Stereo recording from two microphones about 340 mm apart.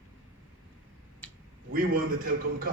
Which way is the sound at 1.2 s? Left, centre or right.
Centre.